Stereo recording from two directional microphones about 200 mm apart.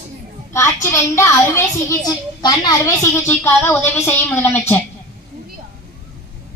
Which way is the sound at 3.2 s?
10° left (ahead or behind).